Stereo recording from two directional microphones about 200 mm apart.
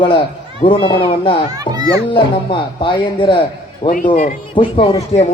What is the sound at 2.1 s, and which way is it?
Speech, 25° left (ahead or behind).